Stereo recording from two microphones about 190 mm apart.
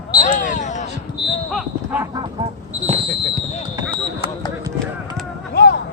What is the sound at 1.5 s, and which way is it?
Speech, 10° right (ahead or behind).